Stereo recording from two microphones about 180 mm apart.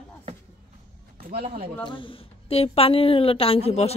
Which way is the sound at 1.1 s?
55° right (ahead or behind).